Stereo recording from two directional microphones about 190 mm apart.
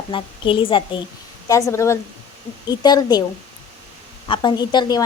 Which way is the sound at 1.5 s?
15° left (ahead or behind).